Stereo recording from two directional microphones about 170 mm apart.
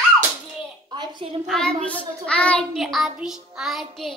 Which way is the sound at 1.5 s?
5° left (ahead or behind).